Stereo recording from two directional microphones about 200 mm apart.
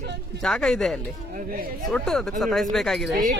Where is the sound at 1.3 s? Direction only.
45° right (ahead or behind).